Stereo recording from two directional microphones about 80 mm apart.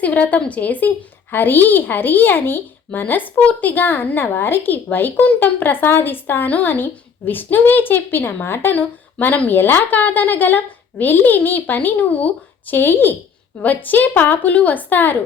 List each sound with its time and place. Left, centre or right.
0.0 s a woman's voice: centre
8.8 s a woman's voice: centre